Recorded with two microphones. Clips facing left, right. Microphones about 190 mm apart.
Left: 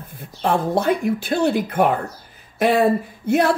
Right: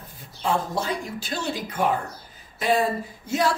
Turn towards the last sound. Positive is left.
turn(degrees=60)  # may be behind; listen again after turning